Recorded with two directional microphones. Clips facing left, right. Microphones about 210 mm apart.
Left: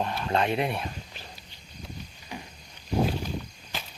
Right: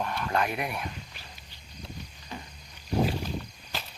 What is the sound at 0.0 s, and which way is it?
Speech, 25° left (ahead or behind).